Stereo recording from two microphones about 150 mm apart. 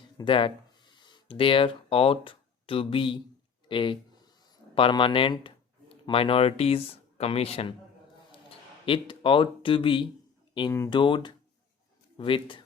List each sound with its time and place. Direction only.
0.2 s speech: 35° left (ahead or behind)